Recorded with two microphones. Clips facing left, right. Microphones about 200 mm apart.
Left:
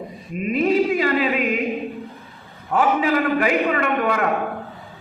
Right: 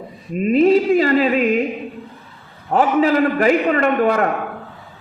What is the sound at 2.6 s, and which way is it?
A man's voice, 40° right (ahead or behind).